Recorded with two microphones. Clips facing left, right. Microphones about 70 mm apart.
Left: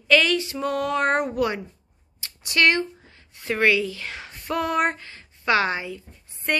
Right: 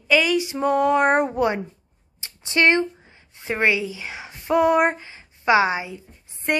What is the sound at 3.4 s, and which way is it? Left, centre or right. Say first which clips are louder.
A woman's voice: left 1 dB; right.